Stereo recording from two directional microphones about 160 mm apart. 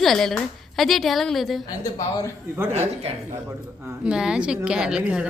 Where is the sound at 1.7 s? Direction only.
20° left (ahead or behind).